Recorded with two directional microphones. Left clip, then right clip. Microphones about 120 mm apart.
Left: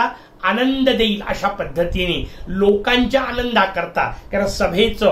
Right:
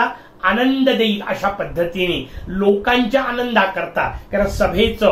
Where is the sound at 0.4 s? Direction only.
25° left (ahead or behind).